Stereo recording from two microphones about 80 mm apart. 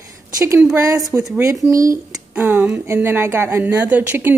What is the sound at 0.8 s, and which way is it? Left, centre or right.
Speech, right.